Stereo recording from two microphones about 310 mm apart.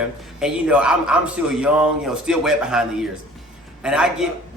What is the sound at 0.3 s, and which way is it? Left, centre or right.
Speech, centre.